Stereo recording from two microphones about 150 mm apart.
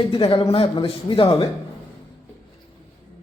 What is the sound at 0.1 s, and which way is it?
A man's voice, 35° left (ahead or behind).